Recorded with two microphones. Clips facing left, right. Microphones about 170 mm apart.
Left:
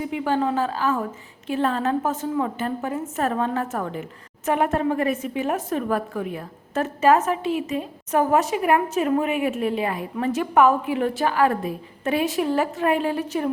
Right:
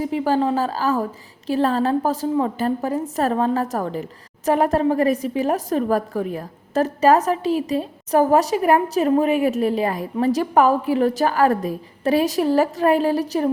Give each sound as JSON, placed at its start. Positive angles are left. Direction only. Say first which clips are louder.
{"t": 0.0, "sound": "a woman's voice", "louder": "right 3 dB", "side_deg": -35}